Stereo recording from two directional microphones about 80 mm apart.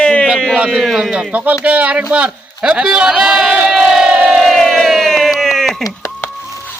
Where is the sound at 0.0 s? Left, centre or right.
Centre.